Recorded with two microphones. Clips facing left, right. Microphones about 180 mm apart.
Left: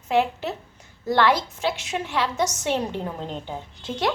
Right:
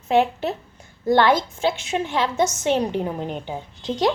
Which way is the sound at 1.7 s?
25° right (ahead or behind).